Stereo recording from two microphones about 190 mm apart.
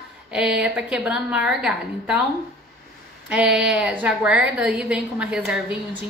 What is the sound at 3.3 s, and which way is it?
A woman's voice, 5° right (ahead or behind).